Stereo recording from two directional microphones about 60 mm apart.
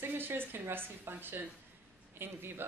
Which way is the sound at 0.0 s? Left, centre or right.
Right.